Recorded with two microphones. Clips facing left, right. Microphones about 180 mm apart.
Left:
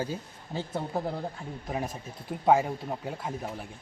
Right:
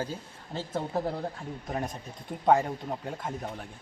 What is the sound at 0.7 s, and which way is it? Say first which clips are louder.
A man's voice: right 2 dB; centre (ahead or behind).